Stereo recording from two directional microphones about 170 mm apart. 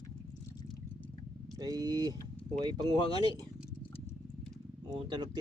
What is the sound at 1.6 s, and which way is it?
Speech, 20° right (ahead or behind).